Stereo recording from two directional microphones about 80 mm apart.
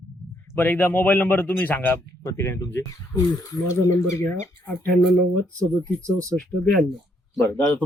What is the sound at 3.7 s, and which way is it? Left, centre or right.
Speech, left.